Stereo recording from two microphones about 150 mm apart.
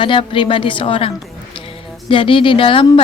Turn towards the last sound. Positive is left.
turn(degrees=35)  # may be behind; listen again after turning